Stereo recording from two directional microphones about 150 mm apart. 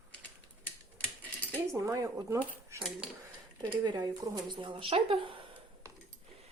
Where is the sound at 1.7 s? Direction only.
20° right (ahead or behind).